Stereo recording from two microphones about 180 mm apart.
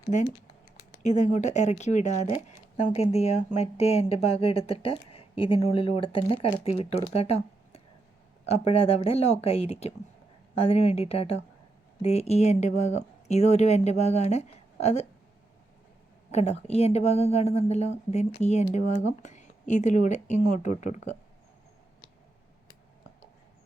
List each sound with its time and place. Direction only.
1.0 s speech: 40° left (ahead or behind)
2.2 s speech: 25° left (ahead or behind)
16.3 s speech: 35° left (ahead or behind)